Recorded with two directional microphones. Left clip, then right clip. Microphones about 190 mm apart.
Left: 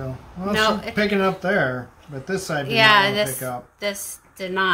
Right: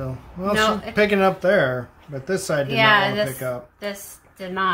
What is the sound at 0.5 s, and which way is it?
Speech, 40° left (ahead or behind).